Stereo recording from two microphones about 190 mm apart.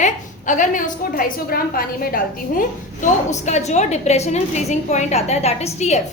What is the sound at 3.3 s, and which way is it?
A woman's voice, 35° left (ahead or behind).